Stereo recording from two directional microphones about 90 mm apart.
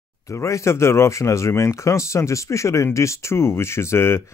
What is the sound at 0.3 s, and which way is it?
Speech, 35° left (ahead or behind).